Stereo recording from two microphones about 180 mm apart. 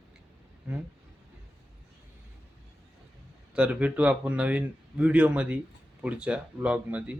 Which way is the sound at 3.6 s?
10° right (ahead or behind).